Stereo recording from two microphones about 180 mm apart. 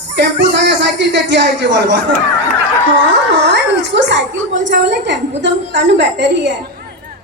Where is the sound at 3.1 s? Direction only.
75° right (ahead or behind).